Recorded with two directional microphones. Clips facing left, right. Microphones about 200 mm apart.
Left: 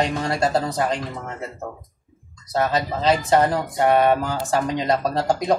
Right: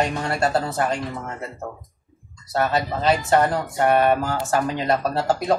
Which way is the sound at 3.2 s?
20° left (ahead or behind).